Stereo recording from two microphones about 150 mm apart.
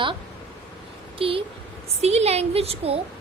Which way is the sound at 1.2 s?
35° right (ahead or behind).